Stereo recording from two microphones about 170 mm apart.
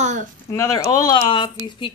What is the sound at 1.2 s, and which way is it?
Speech, 30° left (ahead or behind).